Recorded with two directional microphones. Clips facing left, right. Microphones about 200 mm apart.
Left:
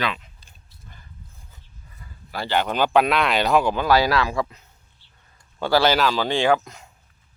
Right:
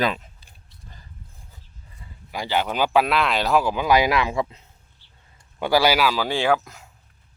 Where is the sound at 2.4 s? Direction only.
10° right (ahead or behind); by 4.6 s 25° right (ahead or behind).